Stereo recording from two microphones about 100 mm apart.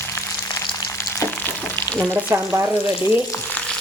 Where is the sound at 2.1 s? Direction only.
20° right (ahead or behind).